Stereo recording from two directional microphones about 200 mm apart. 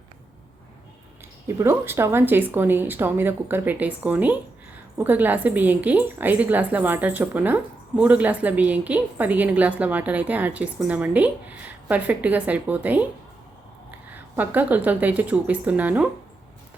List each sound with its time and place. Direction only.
1.5 s a woman's voice: 15° right (ahead or behind)
14.1 s a woman's voice: 10° right (ahead or behind)